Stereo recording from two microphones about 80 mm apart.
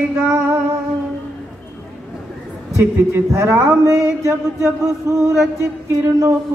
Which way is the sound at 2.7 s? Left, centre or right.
Right.